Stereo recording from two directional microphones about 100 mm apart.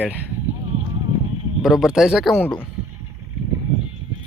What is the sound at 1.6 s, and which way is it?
Speech, 5° right (ahead or behind).